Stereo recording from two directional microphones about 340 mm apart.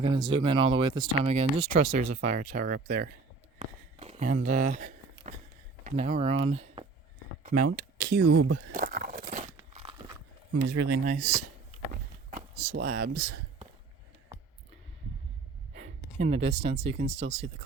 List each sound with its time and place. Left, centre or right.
0.0 s speech: centre
3.6 s a sound: centre
5.8 s speech: centre
7.5 s speech: right
8.5 s crumpling: right
10.5 s speech: right
11.0 s speech: right
12.3 s a sound: right
16.1 s speech: centre